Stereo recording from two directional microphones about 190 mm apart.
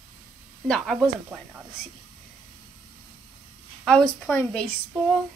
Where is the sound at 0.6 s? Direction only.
Centre (ahead or behind).